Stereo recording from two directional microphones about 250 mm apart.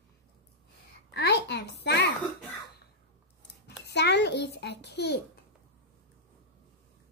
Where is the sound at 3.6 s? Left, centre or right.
Left.